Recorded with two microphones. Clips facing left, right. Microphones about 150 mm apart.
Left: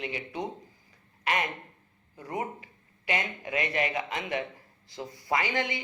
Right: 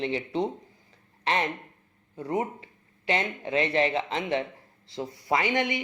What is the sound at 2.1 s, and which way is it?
Speech, 25° right (ahead or behind).